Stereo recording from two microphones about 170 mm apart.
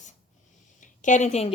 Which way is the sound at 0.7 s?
45° left (ahead or behind).